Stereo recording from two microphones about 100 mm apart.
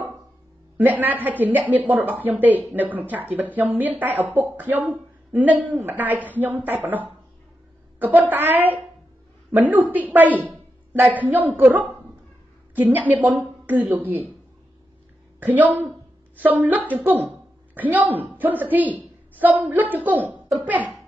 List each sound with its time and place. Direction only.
0.7 s a woman's voice: 15° right (ahead or behind)
15.4 s a woman's voice: 15° right (ahead or behind)